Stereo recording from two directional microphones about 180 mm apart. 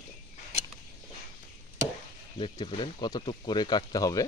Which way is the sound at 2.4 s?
30° left (ahead or behind).